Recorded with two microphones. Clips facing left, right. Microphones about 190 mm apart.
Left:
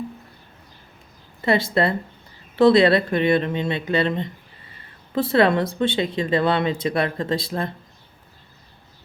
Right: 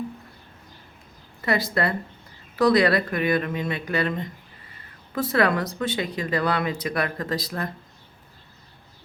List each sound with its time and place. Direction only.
1.4 s speech: 25° left (ahead or behind)